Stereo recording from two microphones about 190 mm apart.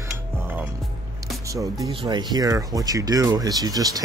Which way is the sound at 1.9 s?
25° right (ahead or behind).